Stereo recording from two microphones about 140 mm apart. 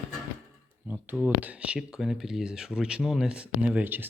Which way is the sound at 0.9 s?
10° right (ahead or behind).